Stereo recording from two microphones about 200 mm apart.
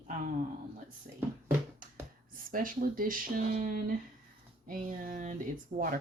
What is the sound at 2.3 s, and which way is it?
Speech, 45° right (ahead or behind).